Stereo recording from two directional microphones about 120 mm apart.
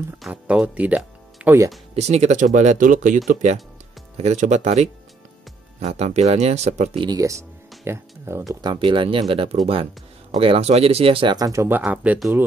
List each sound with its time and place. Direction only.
0.3 s speech: 10° right (ahead or behind)
2.0 s speech: 65° right (ahead or behind); by 3.2 s 90° right
4.2 s speech: 75° right (ahead or behind)
7.0 s speech: 30° right (ahead or behind)
8.5 s speech: 40° right (ahead or behind)
11.3 s speech: 25° right (ahead or behind)